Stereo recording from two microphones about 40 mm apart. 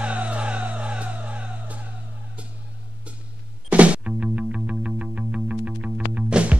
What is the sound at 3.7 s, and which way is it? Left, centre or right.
Music, right.